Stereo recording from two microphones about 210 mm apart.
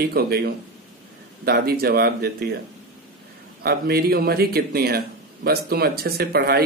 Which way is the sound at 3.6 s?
45° right (ahead or behind).